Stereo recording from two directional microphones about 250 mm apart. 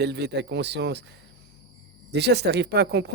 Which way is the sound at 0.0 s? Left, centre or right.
Right.